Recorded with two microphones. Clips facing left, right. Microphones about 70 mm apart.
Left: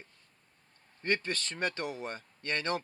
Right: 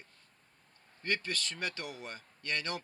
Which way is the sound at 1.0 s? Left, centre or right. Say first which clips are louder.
Left 3 dB; left.